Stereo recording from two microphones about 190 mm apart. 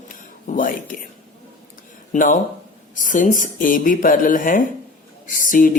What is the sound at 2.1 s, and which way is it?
Speech, 45° left (ahead or behind).